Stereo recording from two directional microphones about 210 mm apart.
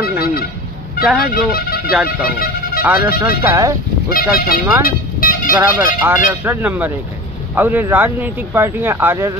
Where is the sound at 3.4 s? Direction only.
15° right (ahead or behind).